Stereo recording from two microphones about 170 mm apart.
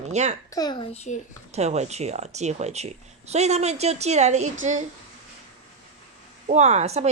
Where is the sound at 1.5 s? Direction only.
40° right (ahead or behind).